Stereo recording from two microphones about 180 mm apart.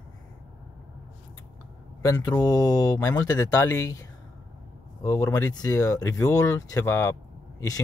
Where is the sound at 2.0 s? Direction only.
20° left (ahead or behind).